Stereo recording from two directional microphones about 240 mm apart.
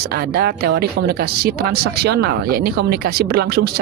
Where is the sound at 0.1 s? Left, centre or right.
Right.